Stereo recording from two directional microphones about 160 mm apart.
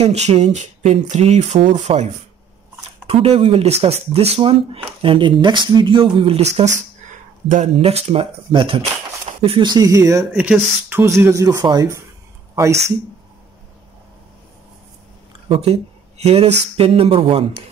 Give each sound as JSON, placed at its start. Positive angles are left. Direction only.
{"t": 0.0, "sound": "speech", "side_deg": -40}
{"t": 3.1, "sound": "speech", "side_deg": -40}
{"t": 10.3, "sound": "speech", "side_deg": -10}
{"t": 15.4, "sound": "speech", "side_deg": -40}